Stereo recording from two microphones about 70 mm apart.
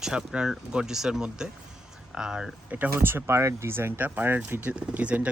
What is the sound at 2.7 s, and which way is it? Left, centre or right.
Speech, right.